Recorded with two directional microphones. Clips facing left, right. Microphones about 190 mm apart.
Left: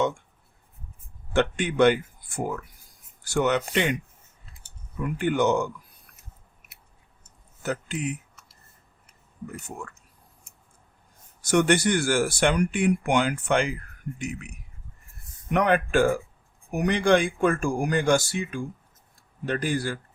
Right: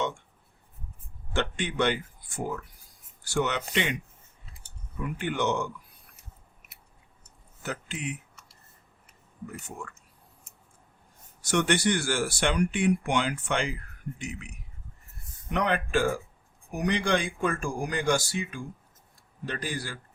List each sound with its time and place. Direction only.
1.3 s speech: 50° left (ahead or behind)
5.2 s speech: 45° left (ahead or behind)
6.1 s chewing: centre (ahead or behind)
7.6 s speech: 45° left (ahead or behind)
11.4 s speech: 45° left (ahead or behind)
15.5 s speech: 50° left (ahead or behind)